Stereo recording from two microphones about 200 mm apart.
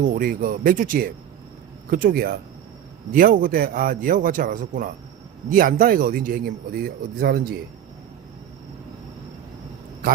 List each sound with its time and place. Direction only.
0.0 s speech: 45° right (ahead or behind)